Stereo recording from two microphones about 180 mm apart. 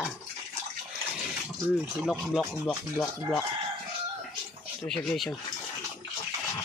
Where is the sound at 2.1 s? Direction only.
5° left (ahead or behind).